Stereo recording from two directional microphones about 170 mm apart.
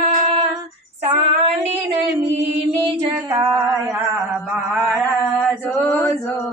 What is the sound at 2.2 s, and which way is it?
Mantra, 35° right (ahead or behind).